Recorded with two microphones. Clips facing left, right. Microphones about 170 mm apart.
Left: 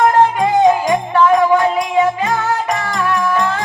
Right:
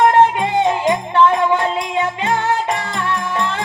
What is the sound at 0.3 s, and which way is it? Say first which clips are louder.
Music: left 5 dB; 25° right (ahead or behind).